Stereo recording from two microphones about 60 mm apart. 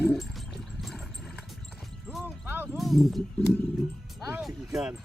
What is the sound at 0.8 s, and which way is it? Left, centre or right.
Vehicle, centre.